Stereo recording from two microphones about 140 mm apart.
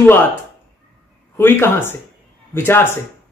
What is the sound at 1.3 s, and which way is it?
Speech, 15° left (ahead or behind).